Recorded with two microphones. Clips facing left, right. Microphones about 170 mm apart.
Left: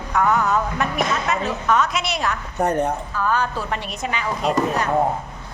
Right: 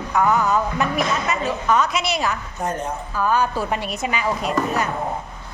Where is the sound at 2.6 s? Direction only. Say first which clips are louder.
Left 7 dB; 65° left (ahead or behind).